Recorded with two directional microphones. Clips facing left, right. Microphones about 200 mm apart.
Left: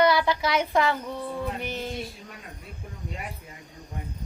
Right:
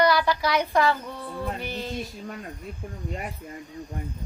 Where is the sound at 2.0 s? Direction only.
45° right (ahead or behind).